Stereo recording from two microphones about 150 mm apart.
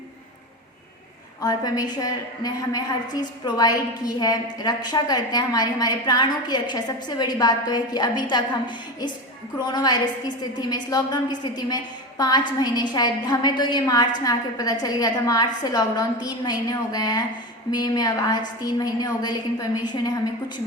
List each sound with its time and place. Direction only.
1.4 s a woman's voice: 25° left (ahead or behind)